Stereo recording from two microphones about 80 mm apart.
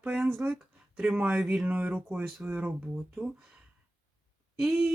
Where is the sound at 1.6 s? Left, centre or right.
Centre.